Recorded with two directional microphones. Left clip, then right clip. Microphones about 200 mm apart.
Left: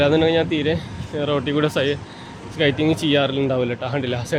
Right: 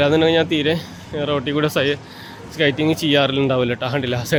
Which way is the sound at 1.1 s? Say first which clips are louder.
Right 1 dB; 10° right (ahead or behind).